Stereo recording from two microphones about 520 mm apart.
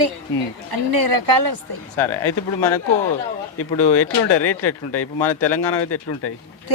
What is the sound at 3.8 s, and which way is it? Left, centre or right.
Speech, left.